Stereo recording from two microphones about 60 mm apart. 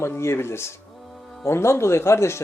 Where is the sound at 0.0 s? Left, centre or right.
Left.